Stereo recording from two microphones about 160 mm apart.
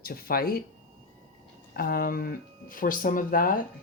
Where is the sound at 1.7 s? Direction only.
65° left (ahead or behind).